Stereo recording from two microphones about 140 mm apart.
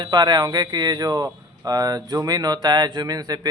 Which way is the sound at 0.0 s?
30° right (ahead or behind).